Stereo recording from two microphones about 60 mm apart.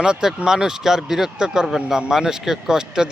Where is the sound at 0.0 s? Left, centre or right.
Centre.